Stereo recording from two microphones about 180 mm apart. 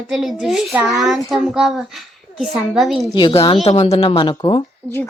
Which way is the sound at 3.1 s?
30° left (ahead or behind).